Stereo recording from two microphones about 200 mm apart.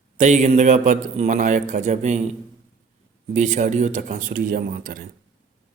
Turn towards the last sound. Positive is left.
turn(degrees=-45)  # may be behind; listen again after turning